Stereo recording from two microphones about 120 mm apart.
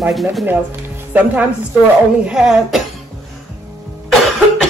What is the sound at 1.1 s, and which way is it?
Speech, 15° right (ahead or behind).